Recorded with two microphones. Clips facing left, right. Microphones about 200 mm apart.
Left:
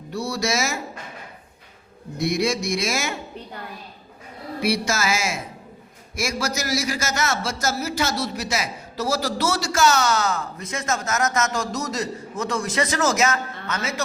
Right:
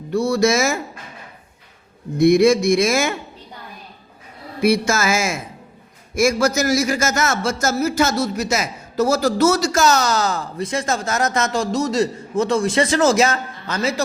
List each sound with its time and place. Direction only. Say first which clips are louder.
0.1 s a man's voice: right 8 dB; 50° right (ahead or behind)
2.1 s a man's voice: right 10 dB; 55° right (ahead or behind)
4.6 s a man's voice: right 6 dB; 50° right (ahead or behind); by 14.0 s 30° right (ahead or behind)